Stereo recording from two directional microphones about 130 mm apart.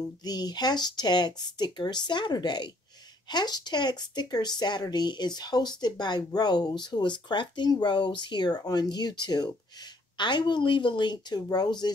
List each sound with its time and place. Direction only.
0.2 s speech: 30° left (ahead or behind)